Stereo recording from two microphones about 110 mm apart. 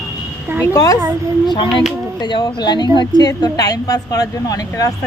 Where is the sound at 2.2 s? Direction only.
45° left (ahead or behind).